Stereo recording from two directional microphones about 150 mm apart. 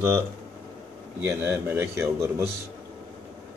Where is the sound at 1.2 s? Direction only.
15° right (ahead or behind).